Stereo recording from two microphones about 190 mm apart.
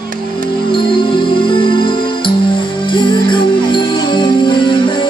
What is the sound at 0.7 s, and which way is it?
Music, 25° left (ahead or behind).